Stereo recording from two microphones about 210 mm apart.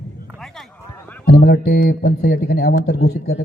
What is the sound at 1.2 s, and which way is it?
Speech, 45° left (ahead or behind).